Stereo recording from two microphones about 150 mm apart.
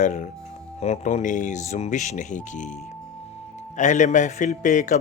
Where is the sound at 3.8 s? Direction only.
55° left (ahead or behind).